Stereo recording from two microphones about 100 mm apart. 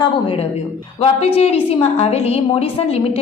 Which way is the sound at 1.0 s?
90° left.